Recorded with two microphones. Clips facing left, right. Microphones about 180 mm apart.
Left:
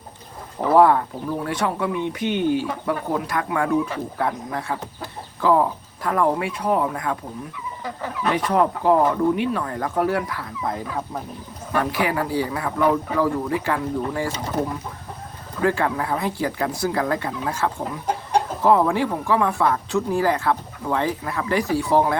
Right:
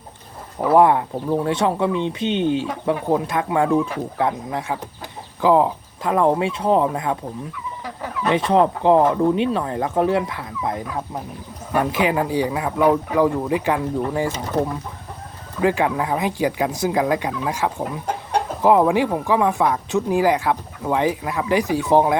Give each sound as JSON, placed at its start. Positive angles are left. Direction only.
{"t": 0.8, "sound": "speech", "side_deg": -20}
{"t": 8.3, "sound": "speech", "side_deg": -25}
{"t": 11.7, "sound": "speech", "side_deg": -20}
{"t": 15.6, "sound": "speech", "side_deg": -15}